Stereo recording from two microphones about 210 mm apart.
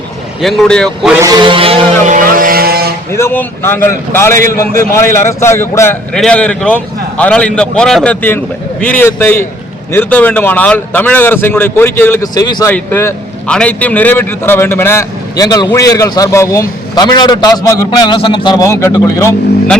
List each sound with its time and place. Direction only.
0.4 s a man's voice: centre (ahead or behind)
1.2 s vehicle: 20° right (ahead or behind); by 2.9 s 45° right (ahead or behind)
3.1 s a man's voice: 10° left (ahead or behind)